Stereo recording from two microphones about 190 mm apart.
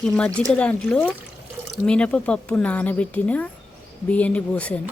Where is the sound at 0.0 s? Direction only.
5° left (ahead or behind).